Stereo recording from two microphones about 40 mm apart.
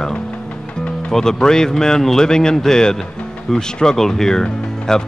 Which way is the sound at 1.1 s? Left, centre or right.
Centre.